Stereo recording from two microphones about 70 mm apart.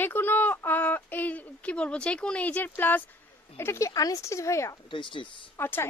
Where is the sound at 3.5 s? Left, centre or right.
Left.